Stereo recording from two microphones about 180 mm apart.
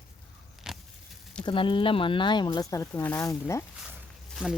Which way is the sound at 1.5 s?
30° left (ahead or behind).